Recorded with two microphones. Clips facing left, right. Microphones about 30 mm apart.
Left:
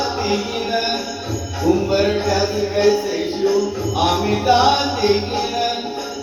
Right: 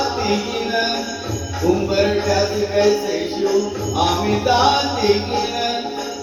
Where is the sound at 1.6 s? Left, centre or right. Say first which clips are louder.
Even; centre.